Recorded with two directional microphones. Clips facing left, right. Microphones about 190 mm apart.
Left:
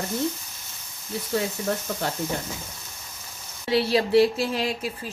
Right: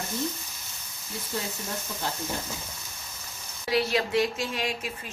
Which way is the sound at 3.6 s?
30° left (ahead or behind).